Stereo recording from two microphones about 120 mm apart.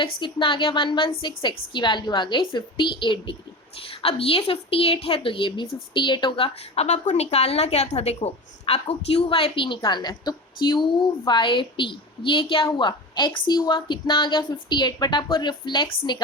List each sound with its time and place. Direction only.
0.0 s a woman's voice: 45° left (ahead or behind)